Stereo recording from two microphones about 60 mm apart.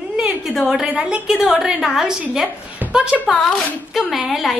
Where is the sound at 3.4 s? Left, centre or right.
Centre.